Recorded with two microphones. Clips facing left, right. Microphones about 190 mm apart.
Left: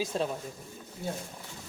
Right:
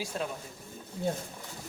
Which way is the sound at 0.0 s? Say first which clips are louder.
Left 4 dB; 25° left (ahead or behind).